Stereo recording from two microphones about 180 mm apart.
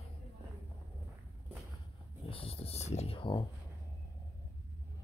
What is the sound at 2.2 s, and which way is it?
Speech, 30° left (ahead or behind).